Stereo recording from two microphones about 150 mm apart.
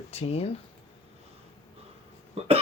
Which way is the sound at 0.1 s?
45° left (ahead or behind).